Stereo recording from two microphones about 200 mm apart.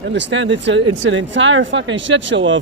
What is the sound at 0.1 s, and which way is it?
Speech, 65° right (ahead or behind).